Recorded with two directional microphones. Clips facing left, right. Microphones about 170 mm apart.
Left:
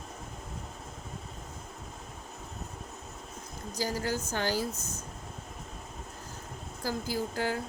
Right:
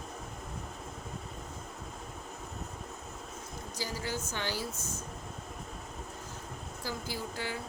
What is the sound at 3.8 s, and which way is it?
Speech, 45° left (ahead or behind).